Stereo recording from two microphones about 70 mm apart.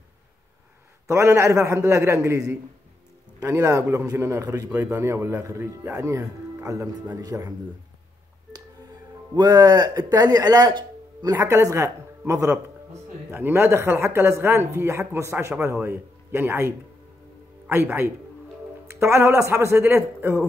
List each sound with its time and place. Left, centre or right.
1.0 s speech: right
3.4 s speech: right
9.3 s speech: right
11.3 s speech: right
13.3 s speech: right